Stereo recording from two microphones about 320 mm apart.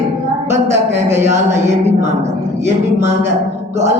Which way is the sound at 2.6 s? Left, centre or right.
Right.